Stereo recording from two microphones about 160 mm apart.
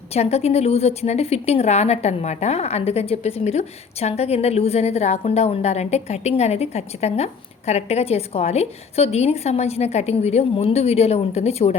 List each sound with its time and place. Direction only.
0.1 s a woman's voice: 40° left (ahead or behind)